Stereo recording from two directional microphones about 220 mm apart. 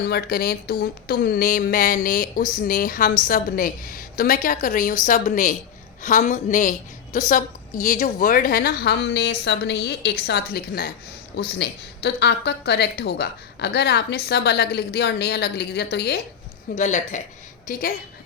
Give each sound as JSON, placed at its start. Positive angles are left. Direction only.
{"t": 0.1, "sound": "a woman's voice", "side_deg": 45}
{"t": 16.7, "sound": "a woman's voice", "side_deg": 35}